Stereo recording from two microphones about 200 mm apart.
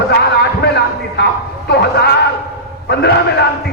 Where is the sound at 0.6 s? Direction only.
55° left (ahead or behind).